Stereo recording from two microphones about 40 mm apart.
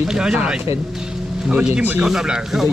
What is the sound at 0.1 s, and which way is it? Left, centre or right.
Speech, centre.